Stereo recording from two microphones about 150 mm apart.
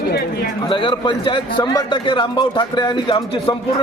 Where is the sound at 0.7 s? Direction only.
35° left (ahead or behind).